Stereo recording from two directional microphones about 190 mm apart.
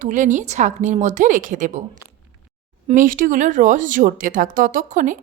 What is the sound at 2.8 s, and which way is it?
Speech, 45° right (ahead or behind).